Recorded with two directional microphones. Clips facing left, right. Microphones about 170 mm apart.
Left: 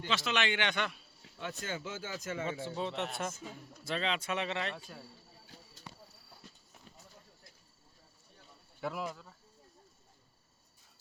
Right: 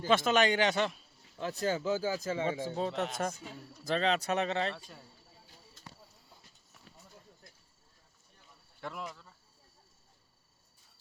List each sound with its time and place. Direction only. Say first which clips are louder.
0.1 s speech: right 7 dB; 50° right (ahead or behind); by 2.6 s 30° right (ahead or behind)
2.6 s speech: right 3 dB; 40° right (ahead or behind)
8.8 s speech: left 4 dB; 5° left (ahead or behind)